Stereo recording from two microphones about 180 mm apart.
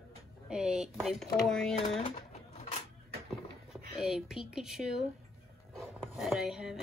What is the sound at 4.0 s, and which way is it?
Speech, 5° right (ahead or behind).